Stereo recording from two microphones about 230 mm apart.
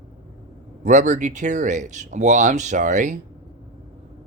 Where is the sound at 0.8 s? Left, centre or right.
Right.